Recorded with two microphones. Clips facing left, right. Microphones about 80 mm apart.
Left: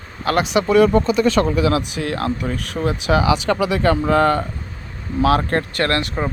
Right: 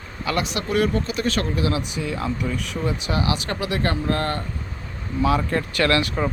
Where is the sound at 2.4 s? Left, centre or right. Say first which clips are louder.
Left 3 dB; left.